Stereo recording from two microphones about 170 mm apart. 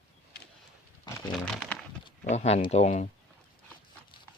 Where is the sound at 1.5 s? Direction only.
5° left (ahead or behind).